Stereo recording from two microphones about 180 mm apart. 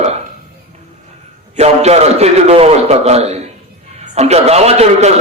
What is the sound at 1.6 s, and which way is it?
A man's voice, 35° right (ahead or behind).